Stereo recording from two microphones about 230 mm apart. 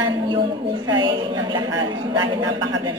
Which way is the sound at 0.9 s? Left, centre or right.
Centre.